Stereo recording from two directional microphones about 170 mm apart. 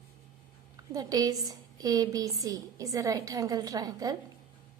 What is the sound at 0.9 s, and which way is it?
A woman's voice, 20° right (ahead or behind).